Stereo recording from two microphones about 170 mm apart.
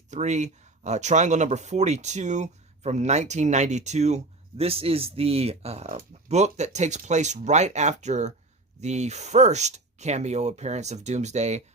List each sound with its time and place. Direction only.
0.1 s speech: 45° right (ahead or behind)